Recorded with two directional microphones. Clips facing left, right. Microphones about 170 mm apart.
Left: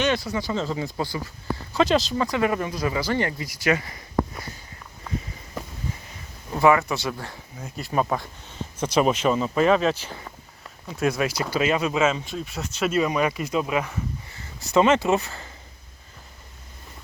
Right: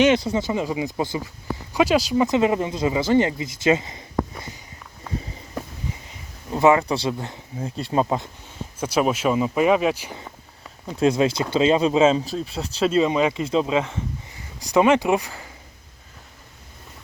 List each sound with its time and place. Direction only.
0.0 s speech: 20° right (ahead or behind)
2.2 s speech: 20° right (ahead or behind)
6.5 s speech: 20° right (ahead or behind)
8.8 s speech: 5° right (ahead or behind)
10.8 s speech: 25° right (ahead or behind)
14.3 s speech: 15° right (ahead or behind)